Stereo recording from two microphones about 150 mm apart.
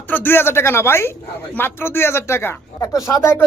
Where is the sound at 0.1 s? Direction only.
15° left (ahead or behind).